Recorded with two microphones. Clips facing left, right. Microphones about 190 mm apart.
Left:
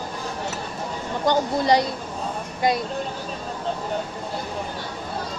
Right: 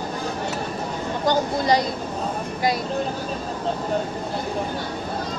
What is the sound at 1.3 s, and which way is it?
Speech, 20° left (ahead or behind).